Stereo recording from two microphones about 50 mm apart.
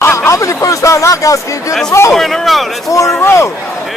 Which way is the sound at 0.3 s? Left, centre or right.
Left.